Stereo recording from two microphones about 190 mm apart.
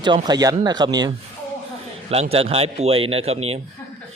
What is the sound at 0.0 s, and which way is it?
Speech, 20° right (ahead or behind).